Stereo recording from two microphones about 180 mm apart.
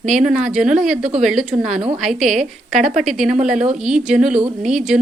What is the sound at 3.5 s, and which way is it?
Speech, 40° right (ahead or behind).